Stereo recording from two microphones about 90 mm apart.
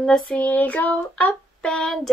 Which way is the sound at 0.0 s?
10° left (ahead or behind).